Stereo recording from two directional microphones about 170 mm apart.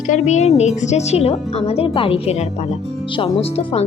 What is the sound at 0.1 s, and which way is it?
Speech, 40° left (ahead or behind).